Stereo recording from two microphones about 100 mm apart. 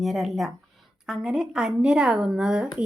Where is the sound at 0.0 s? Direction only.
Centre (ahead or behind).